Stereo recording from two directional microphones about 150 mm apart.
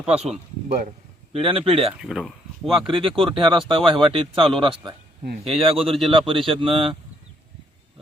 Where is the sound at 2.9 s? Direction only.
35° right (ahead or behind).